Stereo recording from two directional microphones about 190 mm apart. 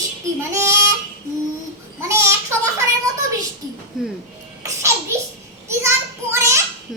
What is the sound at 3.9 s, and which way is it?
Music, centre (ahead or behind).